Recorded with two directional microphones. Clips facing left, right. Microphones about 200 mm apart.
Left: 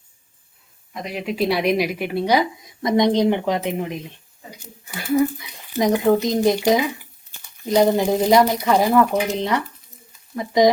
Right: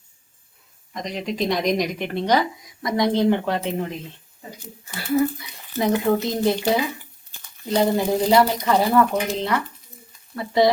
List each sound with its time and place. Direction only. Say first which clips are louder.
0.9 s speech: left 2 dB; 5° left (ahead or behind)
2.8 s speech: left 3 dB; 20° left (ahead or behind)